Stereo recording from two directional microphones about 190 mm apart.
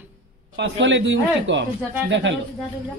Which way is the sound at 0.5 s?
70° right (ahead or behind).